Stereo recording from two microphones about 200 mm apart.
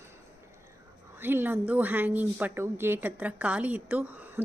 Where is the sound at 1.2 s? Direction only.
10° right (ahead or behind).